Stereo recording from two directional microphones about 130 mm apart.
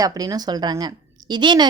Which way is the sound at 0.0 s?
30° right (ahead or behind).